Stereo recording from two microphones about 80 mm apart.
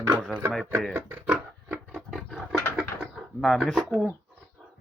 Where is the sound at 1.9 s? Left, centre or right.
Centre.